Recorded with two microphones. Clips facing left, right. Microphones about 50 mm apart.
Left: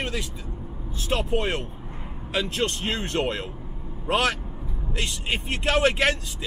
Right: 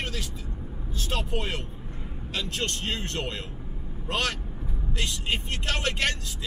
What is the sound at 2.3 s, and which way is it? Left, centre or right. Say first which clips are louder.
Speech: left 5 dB; centre.